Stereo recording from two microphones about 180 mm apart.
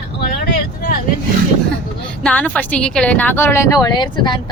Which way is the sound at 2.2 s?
5° left (ahead or behind).